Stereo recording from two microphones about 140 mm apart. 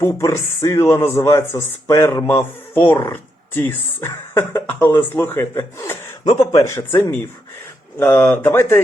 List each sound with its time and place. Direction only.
0.0 s speech: 20° left (ahead or behind)